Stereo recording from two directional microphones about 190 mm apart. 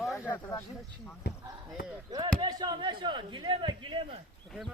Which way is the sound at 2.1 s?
20° right (ahead or behind).